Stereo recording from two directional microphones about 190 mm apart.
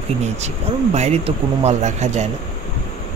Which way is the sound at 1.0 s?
35° right (ahead or behind).